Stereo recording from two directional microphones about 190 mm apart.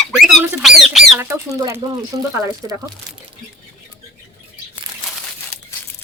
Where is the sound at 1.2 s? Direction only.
15° right (ahead or behind).